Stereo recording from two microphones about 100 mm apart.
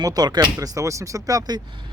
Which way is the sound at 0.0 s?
40° right (ahead or behind).